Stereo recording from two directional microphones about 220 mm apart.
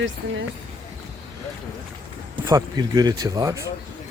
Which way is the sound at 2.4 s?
15° right (ahead or behind).